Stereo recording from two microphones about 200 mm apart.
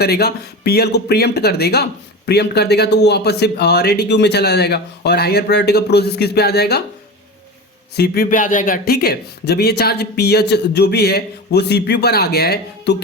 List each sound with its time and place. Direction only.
0.0 s speech: 50° left (ahead or behind)
7.9 s a man's voice: 50° left (ahead or behind)